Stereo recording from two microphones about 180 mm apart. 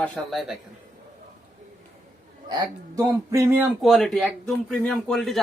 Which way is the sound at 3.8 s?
Centre (ahead or behind).